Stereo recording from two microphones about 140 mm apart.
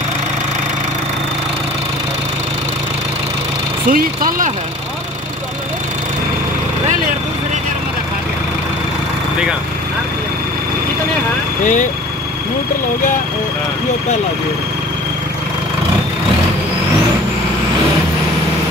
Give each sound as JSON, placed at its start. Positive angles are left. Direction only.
{"t": 3.9, "sound": "speech", "side_deg": -85}
{"t": 11.6, "sound": "speech", "side_deg": 65}